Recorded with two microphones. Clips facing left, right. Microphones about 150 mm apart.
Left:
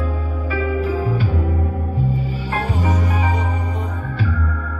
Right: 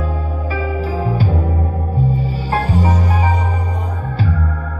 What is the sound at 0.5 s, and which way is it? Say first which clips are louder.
Music: left 2 dB; 35° right (ahead or behind).